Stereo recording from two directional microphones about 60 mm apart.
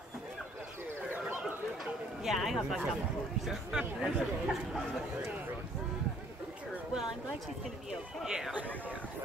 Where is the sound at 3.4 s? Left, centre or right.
Centre.